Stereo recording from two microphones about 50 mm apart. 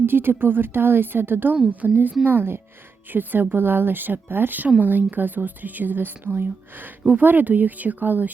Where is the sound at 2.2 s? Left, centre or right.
Right.